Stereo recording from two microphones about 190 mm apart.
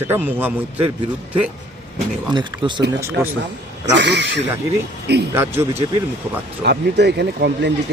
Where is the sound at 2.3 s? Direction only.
25° right (ahead or behind).